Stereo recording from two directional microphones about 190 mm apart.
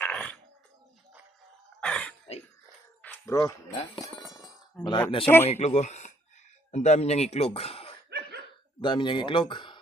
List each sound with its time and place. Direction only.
0.0 s dog: 5° left (ahead or behind)
1.8 s gasp: 5° left (ahead or behind)
3.0 s speech: 10° left (ahead or behind)
4.0 s chink: 20° left (ahead or behind)
5.5 s speech: 35° left (ahead or behind)